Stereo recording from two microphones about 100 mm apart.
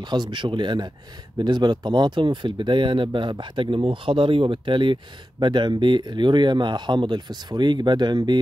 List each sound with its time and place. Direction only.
0.1 s speech: 50° right (ahead or behind)